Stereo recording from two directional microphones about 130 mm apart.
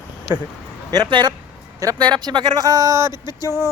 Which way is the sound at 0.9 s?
35° right (ahead or behind).